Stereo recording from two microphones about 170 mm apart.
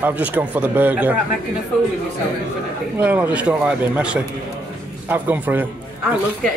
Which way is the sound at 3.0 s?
10° right (ahead or behind).